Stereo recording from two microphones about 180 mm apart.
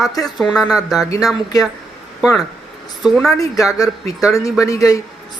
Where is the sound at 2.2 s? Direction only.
Centre (ahead or behind).